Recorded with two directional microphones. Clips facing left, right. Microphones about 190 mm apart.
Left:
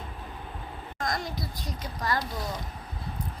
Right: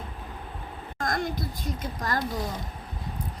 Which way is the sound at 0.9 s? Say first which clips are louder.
Right 3 dB; 55° right (ahead or behind).